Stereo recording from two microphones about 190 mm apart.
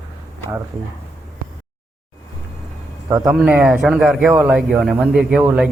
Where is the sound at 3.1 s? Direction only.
15° right (ahead or behind).